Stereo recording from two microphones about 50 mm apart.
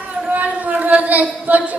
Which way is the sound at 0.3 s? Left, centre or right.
Right.